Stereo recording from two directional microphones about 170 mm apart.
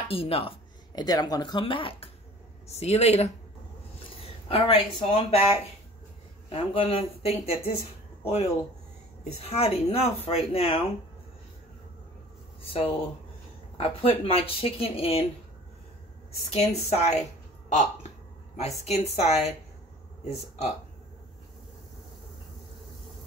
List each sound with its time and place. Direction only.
0.1 s speech: 35° left (ahead or behind)
6.5 s speech: 30° left (ahead or behind)
9.2 s speech: 35° left (ahead or behind)
12.6 s speech: 35° left (ahead or behind)
16.3 s a woman's voice: 40° left (ahead or behind)
18.9 s speech: 40° left (ahead or behind)